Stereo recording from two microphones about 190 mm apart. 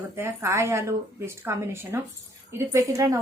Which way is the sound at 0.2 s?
15° right (ahead or behind).